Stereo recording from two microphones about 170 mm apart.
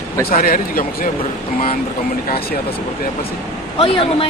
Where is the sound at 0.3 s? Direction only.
55° left (ahead or behind).